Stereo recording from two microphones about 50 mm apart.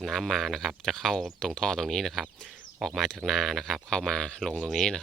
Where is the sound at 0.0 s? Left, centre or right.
Centre.